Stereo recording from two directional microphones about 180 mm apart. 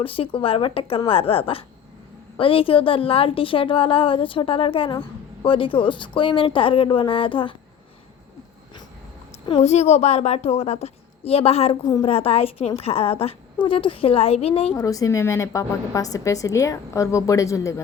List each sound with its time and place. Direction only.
0.0 s a woman's voice: 30° left (ahead or behind)
9.5 s a woman's voice: 35° left (ahead or behind)
14.8 s a woman's voice: 20° left (ahead or behind)